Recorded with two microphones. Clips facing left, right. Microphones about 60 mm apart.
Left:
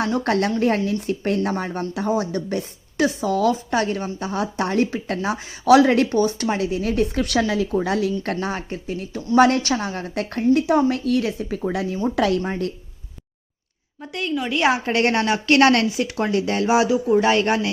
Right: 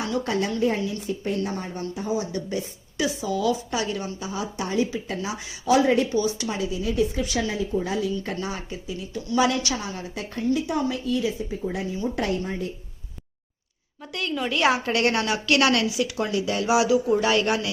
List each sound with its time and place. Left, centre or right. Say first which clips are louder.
0.0 s a woman's voice: left 5 dB; left
5.6 s a woman's voice: left 6 dB; left
12.0 s speech: left 7 dB; left
12.4 s a woman's voice: left 5 dB; left
14.0 s a woman's voice: left 3 dB; left